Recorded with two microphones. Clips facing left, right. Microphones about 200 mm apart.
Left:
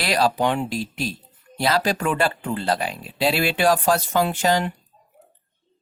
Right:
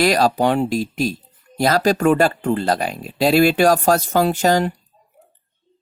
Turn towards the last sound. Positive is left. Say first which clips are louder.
# right 4 dB
turn(degrees=-45)  # may be behind; listen again after turning